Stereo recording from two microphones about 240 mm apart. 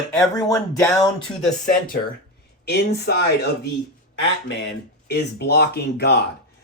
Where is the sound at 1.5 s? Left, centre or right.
Left.